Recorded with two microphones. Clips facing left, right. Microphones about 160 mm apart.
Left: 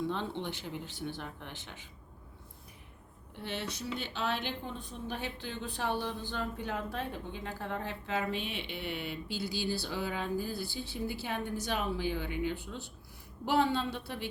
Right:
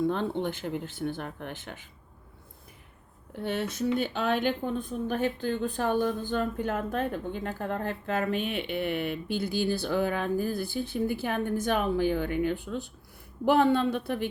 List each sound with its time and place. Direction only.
0.0 s speech: 50° right (ahead or behind)
3.4 s speech: 55° right (ahead or behind)